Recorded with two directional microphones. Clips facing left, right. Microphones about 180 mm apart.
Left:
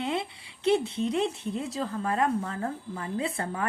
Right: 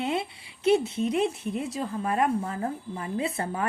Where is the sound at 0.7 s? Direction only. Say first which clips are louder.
Right 2 dB; 20° right (ahead or behind).